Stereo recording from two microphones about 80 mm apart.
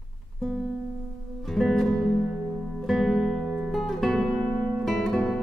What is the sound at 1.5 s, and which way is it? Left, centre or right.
Music, centre.